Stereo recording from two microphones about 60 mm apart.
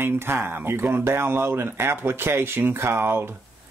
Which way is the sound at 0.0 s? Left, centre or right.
Right.